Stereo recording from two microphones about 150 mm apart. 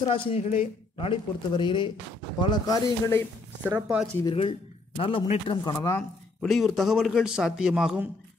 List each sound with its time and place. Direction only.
0.0 s a man's voice: 35° left (ahead or behind); by 3.3 s 20° left (ahead or behind)
3.6 s speech: 10° right (ahead or behind)
4.4 s a man's voice: 40° left (ahead or behind)
5.9 s a man's voice: centre (ahead or behind)